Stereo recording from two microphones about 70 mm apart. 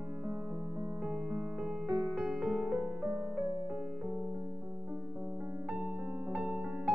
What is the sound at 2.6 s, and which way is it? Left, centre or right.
Music, centre.